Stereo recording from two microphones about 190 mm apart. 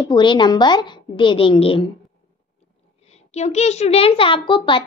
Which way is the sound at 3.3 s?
35° left (ahead or behind).